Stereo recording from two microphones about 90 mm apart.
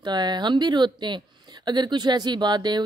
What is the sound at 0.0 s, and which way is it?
Speech, 55° right (ahead or behind).